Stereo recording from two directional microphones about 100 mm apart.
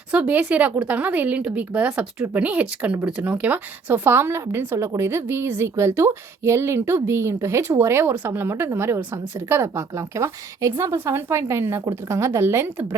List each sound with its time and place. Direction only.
0.1 s a woman's voice: 15° right (ahead or behind)